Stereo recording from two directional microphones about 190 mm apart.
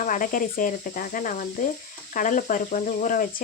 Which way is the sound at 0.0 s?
45° left (ahead or behind).